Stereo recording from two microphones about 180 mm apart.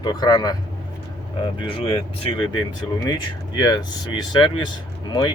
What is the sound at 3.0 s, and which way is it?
Speech, 20° left (ahead or behind).